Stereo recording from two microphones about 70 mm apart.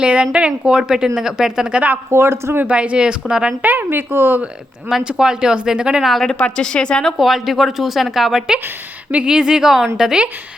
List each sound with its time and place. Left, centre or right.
0.0 s a woman's voice: centre
2.0 s speech: right
2.6 s a woman's voice: centre
3.6 s speech: right
4.9 s a woman's voice: centre
6.1 s a woman's voice: centre
6.4 s a woman's voice: centre
7.0 s a woman's voice: centre